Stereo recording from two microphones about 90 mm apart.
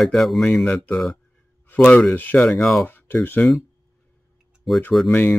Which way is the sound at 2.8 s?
25° left (ahead or behind).